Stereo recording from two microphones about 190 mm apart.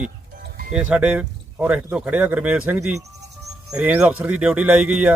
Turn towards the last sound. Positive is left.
turn(degrees=-10)  # may be behind; listen again after turning